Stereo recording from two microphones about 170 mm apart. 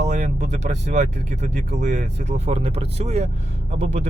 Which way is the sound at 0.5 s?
45° right (ahead or behind).